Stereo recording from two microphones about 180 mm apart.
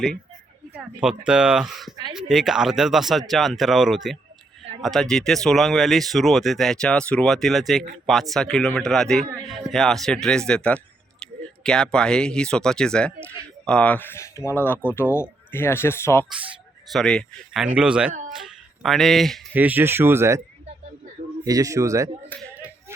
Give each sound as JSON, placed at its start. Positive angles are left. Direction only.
{"t": 1.0, "sound": "speech", "side_deg": -5}
{"t": 16.9, "sound": "speech", "side_deg": 5}
{"t": 19.5, "sound": "speech", "side_deg": -10}
{"t": 21.4, "sound": "speech", "side_deg": -20}
{"t": 22.3, "sound": "speech", "side_deg": 10}